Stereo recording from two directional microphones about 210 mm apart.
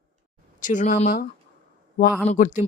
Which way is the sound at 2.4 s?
35° left (ahead or behind).